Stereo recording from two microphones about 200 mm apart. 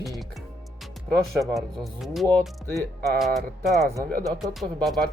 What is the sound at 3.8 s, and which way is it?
Speech, 15° right (ahead or behind).